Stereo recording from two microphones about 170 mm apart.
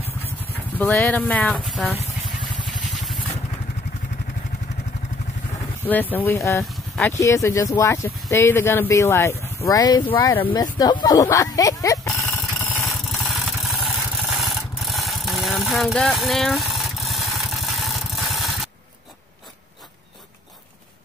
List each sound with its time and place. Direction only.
0.7 s speech: 10° left (ahead or behind)
5.9 s speech: 10° left (ahead or behind)
12.5 s rub: centre (ahead or behind)